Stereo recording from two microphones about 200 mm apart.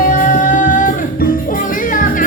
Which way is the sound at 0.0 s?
40° left (ahead or behind).